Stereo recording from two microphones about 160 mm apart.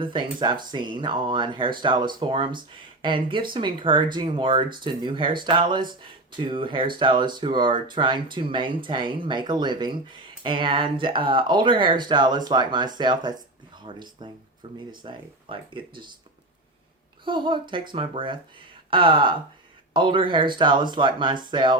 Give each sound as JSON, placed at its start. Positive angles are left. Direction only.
{"t": 0.0, "sound": "speech", "side_deg": -30}
{"t": 17.2, "sound": "speech", "side_deg": -30}